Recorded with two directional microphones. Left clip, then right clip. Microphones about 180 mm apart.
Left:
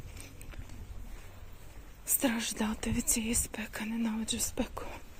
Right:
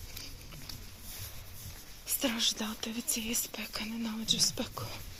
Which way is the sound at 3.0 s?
15° left (ahead or behind).